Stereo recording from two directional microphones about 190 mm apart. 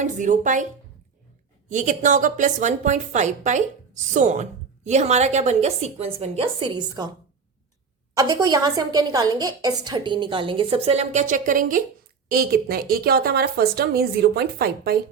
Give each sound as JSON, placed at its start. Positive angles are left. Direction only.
{"t": 0.0, "sound": "a woman's voice", "side_deg": -40}
{"t": 1.7, "sound": "a woman's voice", "side_deg": -40}
{"t": 8.1, "sound": "a woman's voice", "side_deg": -20}